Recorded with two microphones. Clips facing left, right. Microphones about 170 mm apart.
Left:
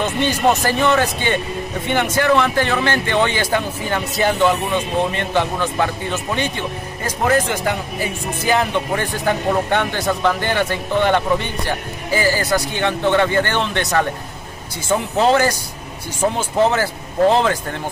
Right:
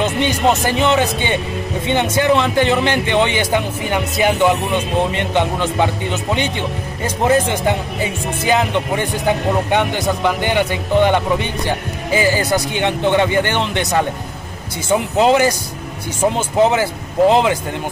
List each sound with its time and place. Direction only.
0.0 s a man's voice: 20° right (ahead or behind)
7.2 s speech: 20° right (ahead or behind)